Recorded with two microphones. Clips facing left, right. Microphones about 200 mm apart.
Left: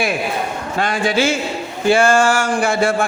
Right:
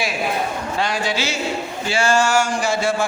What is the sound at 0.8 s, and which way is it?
A man's voice, 55° left (ahead or behind).